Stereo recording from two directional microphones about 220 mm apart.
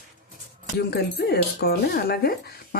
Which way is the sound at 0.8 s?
45° left (ahead or behind).